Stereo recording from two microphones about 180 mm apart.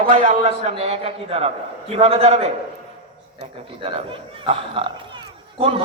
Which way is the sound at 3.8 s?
30° right (ahead or behind).